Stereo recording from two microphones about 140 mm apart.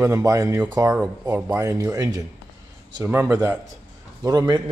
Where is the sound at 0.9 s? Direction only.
10° right (ahead or behind).